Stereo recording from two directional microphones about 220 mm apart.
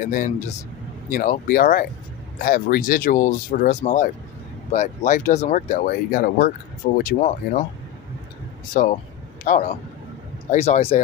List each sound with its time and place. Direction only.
0.1 s speech: 35° left (ahead or behind)
8.7 s speech: 40° left (ahead or behind)